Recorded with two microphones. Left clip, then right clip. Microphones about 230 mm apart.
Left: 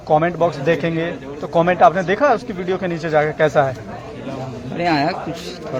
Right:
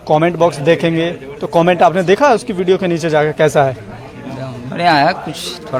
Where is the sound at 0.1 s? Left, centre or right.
Right.